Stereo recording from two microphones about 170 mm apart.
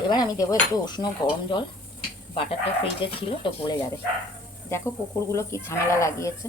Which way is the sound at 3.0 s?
30° left (ahead or behind).